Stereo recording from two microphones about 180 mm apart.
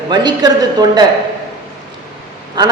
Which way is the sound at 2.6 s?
25° right (ahead or behind).